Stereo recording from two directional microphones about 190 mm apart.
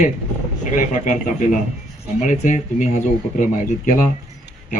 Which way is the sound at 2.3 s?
40° left (ahead or behind).